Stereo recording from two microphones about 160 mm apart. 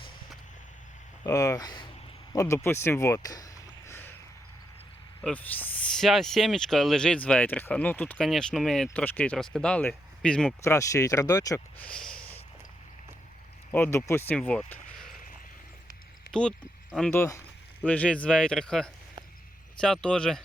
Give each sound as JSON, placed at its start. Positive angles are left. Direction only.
{"t": 1.2, "sound": "speech", "side_deg": 20}
{"t": 5.2, "sound": "speech", "side_deg": 10}
{"t": 10.6, "sound": "speech", "side_deg": 20}
{"t": 11.8, "sound": "a sound", "side_deg": 5}
{"t": 13.7, "sound": "speech", "side_deg": 15}
{"t": 14.7, "sound": "a sound", "side_deg": 0}
{"t": 16.3, "sound": "speech", "side_deg": 5}
{"t": 17.1, "sound": "speech", "side_deg": 20}
{"t": 17.8, "sound": "speech", "side_deg": 10}